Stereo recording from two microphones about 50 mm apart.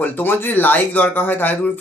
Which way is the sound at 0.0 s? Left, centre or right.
Left.